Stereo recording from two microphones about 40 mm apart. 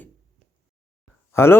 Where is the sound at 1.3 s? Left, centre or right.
Left.